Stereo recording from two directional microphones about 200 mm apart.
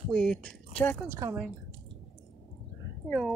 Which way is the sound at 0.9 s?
10° right (ahead or behind).